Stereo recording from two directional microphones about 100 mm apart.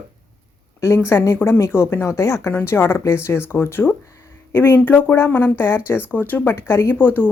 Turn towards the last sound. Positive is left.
turn(degrees=20)  # may be behind; listen again after turning